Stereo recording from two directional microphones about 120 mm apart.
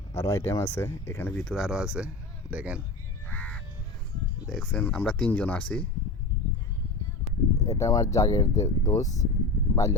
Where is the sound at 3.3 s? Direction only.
10° left (ahead or behind).